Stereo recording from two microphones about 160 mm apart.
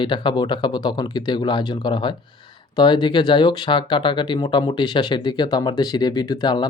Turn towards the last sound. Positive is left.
turn(degrees=25)  # may be behind; listen again after turning